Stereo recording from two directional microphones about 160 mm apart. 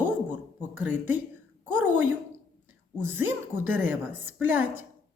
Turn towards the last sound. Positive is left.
turn(degrees=-10)  # may be behind; listen again after turning